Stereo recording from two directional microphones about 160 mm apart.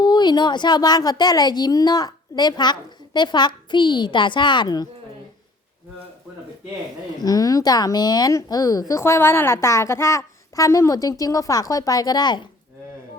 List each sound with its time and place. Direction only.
0.0 s speech: 25° left (ahead or behind)
7.2 s speech: 25° left (ahead or behind)